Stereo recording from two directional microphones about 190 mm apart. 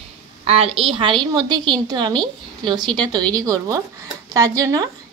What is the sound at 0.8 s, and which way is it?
A woman's voice, 25° right (ahead or behind).